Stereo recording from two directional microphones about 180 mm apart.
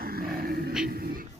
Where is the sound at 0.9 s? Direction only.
55° right (ahead or behind).